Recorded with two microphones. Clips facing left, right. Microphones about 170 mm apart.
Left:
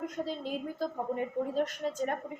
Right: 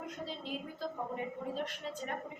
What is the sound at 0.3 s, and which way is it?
A woman's voice, 45° left (ahead or behind).